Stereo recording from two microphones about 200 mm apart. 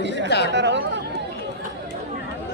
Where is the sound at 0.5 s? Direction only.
60° right (ahead or behind).